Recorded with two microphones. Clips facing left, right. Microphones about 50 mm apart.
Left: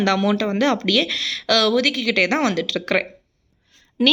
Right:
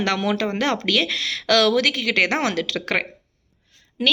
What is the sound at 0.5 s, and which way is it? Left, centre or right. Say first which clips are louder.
Speech: left 2 dB; right.